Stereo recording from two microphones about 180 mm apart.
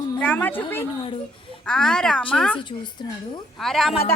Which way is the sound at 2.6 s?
25° left (ahead or behind).